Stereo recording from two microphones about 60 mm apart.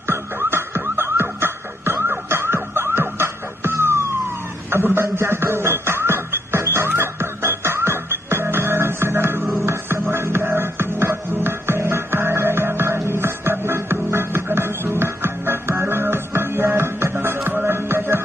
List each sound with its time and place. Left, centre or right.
0.0 s music: right